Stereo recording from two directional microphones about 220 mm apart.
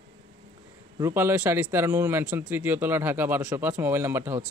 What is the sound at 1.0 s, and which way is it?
A man's voice, 10° right (ahead or behind).